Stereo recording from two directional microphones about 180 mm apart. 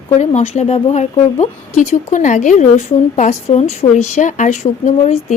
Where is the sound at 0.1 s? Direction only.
40° left (ahead or behind).